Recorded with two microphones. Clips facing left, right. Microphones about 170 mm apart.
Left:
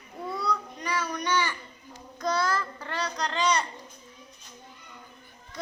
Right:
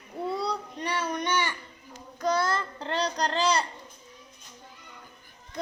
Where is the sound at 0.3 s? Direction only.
30° right (ahead or behind).